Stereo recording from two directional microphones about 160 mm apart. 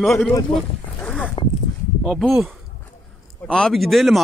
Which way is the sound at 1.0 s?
5° left (ahead or behind).